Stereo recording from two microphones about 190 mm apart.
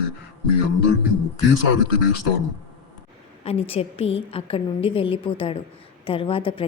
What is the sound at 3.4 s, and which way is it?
A woman's voice, 30° left (ahead or behind).